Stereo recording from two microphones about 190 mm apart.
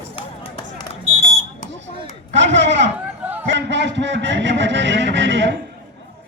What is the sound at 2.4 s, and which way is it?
A man's voice, 65° right (ahead or behind).